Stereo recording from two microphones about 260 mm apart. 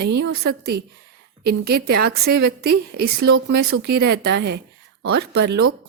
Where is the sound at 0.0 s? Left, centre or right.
Right.